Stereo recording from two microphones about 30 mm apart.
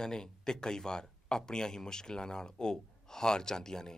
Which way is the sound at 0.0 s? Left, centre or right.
Left.